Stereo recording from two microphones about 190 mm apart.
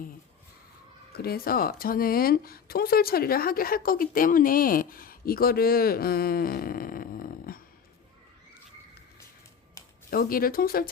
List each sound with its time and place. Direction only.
1.1 s speech: 55° left (ahead or behind)
10.1 s speech: 50° left (ahead or behind)